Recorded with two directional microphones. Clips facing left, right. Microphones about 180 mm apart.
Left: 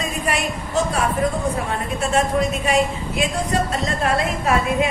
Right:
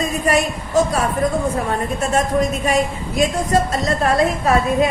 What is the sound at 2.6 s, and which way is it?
A woman's voice, 40° right (ahead or behind).